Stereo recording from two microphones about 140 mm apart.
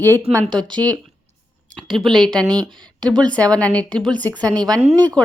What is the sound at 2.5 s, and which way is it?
Speech, 30° right (ahead or behind).